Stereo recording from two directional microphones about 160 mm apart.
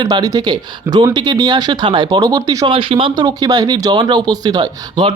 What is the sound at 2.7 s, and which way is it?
A man's voice, 35° right (ahead or behind).